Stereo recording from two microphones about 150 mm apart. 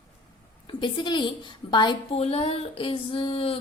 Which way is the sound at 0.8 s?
30° left (ahead or behind).